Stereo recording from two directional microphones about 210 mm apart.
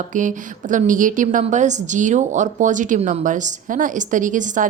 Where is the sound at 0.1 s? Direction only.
35° right (ahead or behind).